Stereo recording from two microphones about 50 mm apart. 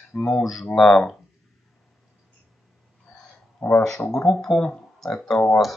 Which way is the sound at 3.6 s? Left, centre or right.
Left.